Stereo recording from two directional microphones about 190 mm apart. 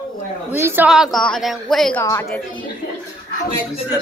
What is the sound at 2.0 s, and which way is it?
Speech, 15° left (ahead or behind).